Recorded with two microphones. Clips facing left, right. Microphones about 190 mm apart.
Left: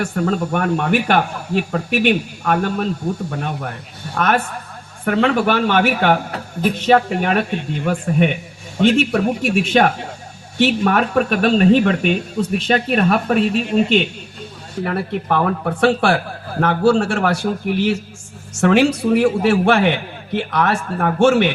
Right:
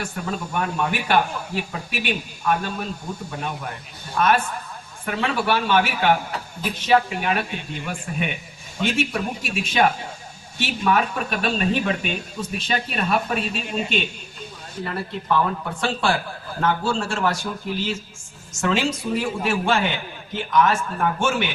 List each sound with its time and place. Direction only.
0.0 s a man's voice: 65° left (ahead or behind)